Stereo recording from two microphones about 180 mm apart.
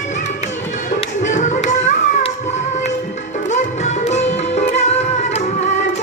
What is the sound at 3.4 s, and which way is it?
Music, 40° left (ahead or behind).